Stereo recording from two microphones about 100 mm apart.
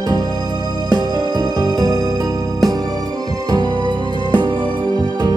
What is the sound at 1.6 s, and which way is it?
Music, 40° right (ahead or behind).